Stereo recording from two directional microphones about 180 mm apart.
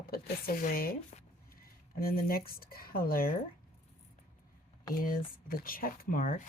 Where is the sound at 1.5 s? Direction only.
55° left (ahead or behind).